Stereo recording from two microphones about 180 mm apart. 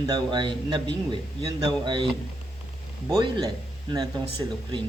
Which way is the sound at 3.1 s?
25° right (ahead or behind).